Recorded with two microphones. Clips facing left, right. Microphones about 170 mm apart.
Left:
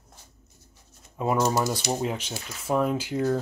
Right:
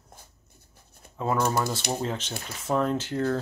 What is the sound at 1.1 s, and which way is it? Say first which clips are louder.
Speech: left 2 dB; 15° left (ahead or behind).